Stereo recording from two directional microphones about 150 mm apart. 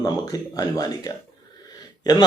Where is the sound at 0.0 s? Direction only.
25° left (ahead or behind).